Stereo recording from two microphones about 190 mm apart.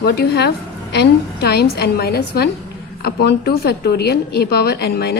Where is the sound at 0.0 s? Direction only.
55° left (ahead or behind).